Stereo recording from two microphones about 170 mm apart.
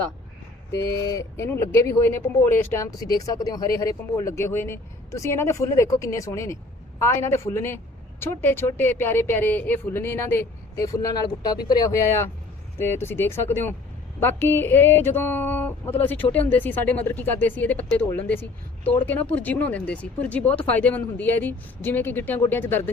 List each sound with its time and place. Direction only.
1.0 s speech: 20° left (ahead or behind)